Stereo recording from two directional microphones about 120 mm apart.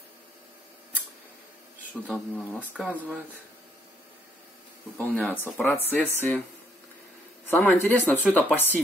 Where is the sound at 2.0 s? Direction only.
Centre (ahead or behind).